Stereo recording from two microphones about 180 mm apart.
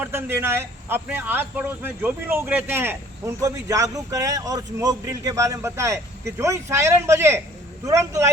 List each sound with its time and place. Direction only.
0.0 s speech: 15° right (ahead or behind)